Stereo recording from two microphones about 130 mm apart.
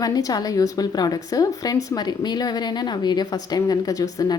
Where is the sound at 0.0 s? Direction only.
30° left (ahead or behind).